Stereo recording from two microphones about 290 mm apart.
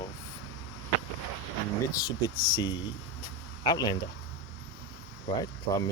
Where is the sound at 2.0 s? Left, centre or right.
Centre.